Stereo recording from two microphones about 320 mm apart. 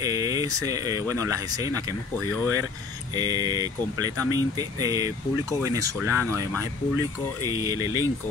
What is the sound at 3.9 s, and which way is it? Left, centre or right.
Speech, left.